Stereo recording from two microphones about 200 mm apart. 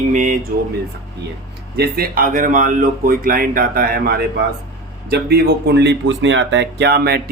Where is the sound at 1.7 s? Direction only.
45° right (ahead or behind).